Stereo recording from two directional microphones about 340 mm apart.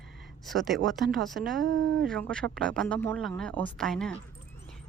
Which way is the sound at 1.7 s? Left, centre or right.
Right.